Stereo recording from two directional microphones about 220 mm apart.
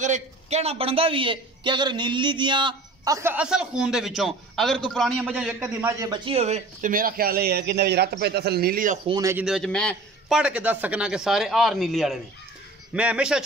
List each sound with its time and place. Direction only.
0.0 s a man's voice: 30° right (ahead or behind)
9.0 s a man's voice: 15° right (ahead or behind)
9.4 s a man's voice: centre (ahead or behind)